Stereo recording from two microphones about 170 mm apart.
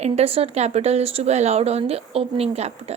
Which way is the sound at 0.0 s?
35° right (ahead or behind).